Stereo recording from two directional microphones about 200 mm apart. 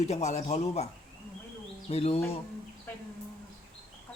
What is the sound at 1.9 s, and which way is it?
Speech, 30° left (ahead or behind).